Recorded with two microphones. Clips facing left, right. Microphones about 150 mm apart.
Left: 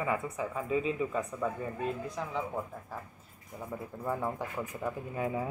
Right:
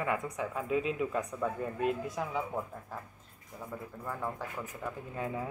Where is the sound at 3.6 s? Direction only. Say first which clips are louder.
Left 3 dB; 15° left (ahead or behind).